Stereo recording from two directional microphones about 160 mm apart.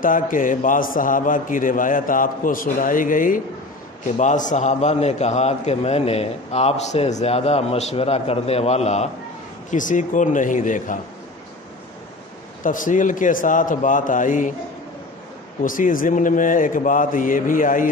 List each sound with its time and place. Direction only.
0.0 s a man's voice: 60° left (ahead or behind)
12.6 s a man's voice: 55° left (ahead or behind)
15.6 s a man's voice: 60° left (ahead or behind)